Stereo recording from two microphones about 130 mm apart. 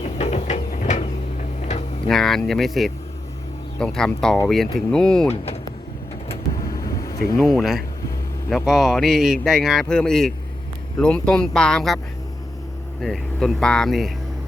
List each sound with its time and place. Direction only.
0.0 s a sound: 60° left (ahead or behind)
2.0 s speech: 5° left (ahead or behind)
6.7 s vehicle: 25° left (ahead or behind)
7.3 s speech: centre (ahead or behind)
13.0 s speech: centre (ahead or behind)